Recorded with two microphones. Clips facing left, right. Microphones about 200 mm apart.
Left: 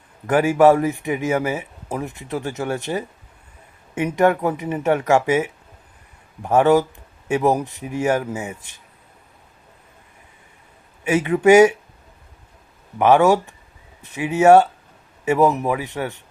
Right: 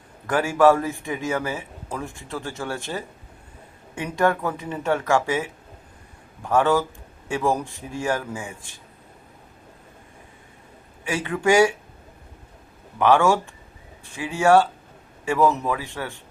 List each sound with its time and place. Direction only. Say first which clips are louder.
0.3 s speech: left 4 dB; 15° left (ahead or behind)
11.1 s speech: left 7 dB; 20° left (ahead or behind)
13.0 s speech: left 4 dB; 20° left (ahead or behind)